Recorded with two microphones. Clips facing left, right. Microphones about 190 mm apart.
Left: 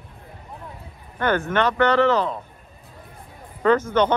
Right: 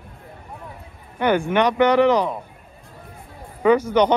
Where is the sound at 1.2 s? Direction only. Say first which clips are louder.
Right 3 dB; 15° right (ahead or behind).